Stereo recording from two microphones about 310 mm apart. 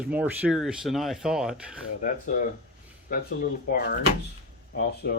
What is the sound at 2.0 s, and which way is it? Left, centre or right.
Speech, left.